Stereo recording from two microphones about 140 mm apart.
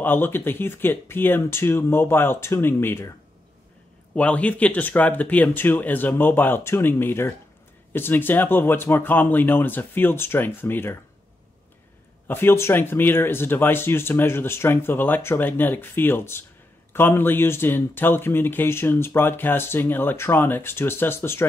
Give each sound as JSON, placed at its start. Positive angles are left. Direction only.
{"t": 0.0, "sound": "speech", "side_deg": 15}
{"t": 4.1, "sound": "speech", "side_deg": 10}
{"t": 12.3, "sound": "speech", "side_deg": 15}